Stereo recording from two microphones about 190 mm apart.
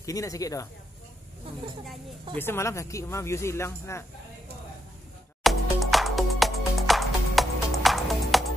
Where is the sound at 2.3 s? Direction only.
10° left (ahead or behind).